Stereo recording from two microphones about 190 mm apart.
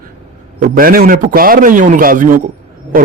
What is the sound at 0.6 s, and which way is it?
A man's voice, 50° right (ahead or behind).